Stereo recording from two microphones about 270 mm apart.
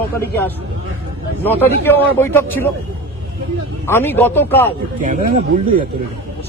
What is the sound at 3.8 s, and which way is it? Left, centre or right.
Speech, centre.